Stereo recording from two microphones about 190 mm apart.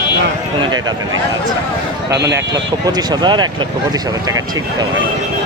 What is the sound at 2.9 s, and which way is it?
Speech, 20° right (ahead or behind).